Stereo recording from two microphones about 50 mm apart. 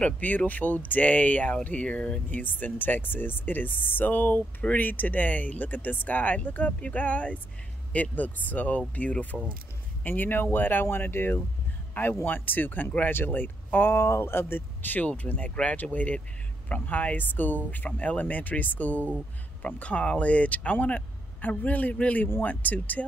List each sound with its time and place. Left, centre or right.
0.0 s speech: left
9.3 s speech: centre
10.0 s speech: left